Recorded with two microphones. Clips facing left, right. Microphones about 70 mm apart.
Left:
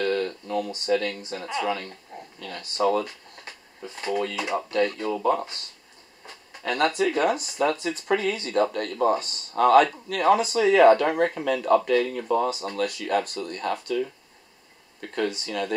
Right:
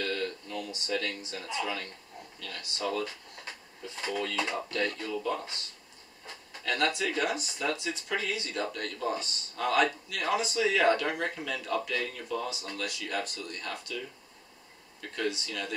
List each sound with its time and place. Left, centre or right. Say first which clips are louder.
0.0 s a sound: left 8 dB; left
1.0 s speech: left 6 dB; left
2.1 s a sound: left 6 dB; left
2.4 s speech: left 5 dB; left
4.0 s speech: left 6 dB; left
4.6 s speech: left 7 dB; left
5.1 s speech: left 9 dB; left
6.8 s speech: left 8 dB; left